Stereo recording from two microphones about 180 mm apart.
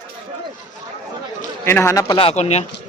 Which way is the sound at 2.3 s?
40° left (ahead or behind).